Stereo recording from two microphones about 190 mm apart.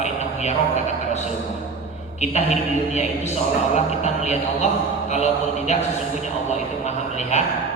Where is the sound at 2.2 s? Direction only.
35° left (ahead or behind).